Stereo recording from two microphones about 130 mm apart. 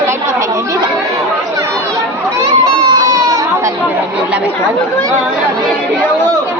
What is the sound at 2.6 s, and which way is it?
Crowd, 25° right (ahead or behind).